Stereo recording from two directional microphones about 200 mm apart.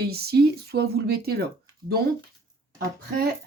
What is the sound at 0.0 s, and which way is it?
Speech, 50° right (ahead or behind).